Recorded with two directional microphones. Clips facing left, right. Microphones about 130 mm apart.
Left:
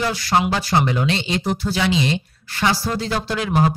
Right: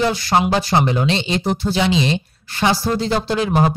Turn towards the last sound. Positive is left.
turn(degrees=-25)  # may be behind; listen again after turning